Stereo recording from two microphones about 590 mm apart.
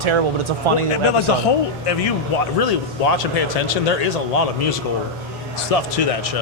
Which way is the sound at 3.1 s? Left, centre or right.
Left.